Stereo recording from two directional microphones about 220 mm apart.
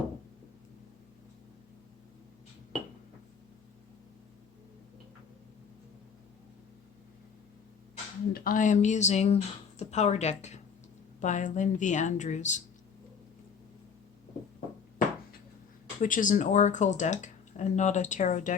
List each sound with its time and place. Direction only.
8.3 s speech: 40° left (ahead or behind)
16.0 s speech: 35° left (ahead or behind)